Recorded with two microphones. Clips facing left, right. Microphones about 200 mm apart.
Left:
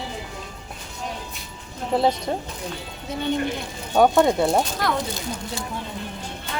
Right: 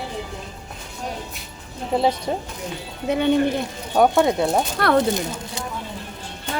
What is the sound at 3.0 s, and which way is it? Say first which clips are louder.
Speech: right 8 dB; 65° right (ahead or behind).